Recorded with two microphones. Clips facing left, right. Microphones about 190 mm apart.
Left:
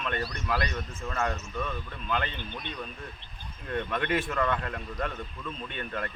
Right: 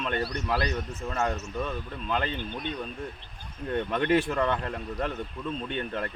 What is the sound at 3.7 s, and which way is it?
Speech, 35° right (ahead or behind).